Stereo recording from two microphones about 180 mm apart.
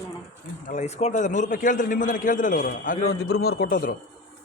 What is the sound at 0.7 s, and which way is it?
A man's voice, 40° left (ahead or behind).